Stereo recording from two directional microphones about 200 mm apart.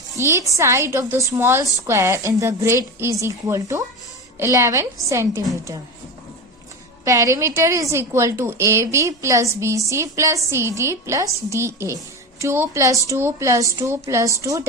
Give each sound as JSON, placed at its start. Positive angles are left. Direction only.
{"t": 0.2, "sound": "a woman's voice", "side_deg": -15}
{"t": 7.0, "sound": "a woman's voice", "side_deg": -15}